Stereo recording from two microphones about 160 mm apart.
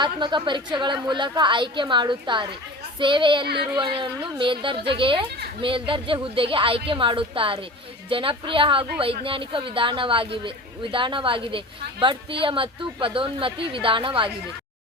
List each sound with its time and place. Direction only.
0.0 s a woman's voice: 30° right (ahead or behind)